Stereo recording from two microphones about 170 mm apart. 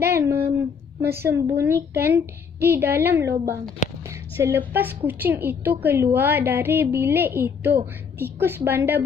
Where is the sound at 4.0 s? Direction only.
15° right (ahead or behind).